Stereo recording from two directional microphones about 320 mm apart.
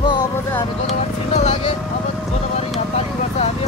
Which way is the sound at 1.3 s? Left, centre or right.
Left.